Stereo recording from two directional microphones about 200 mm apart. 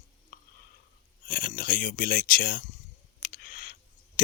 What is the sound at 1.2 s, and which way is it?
Speech, 45° left (ahead or behind).